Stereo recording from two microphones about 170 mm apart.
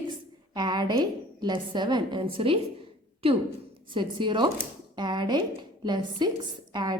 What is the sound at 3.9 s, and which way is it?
A woman's voice, 30° right (ahead or behind).